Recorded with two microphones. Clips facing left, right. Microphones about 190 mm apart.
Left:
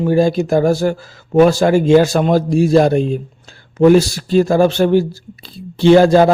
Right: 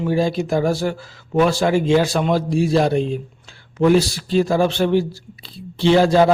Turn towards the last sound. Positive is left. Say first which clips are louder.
# left 5 dB
turn(degrees=45)  # may be behind; listen again after turning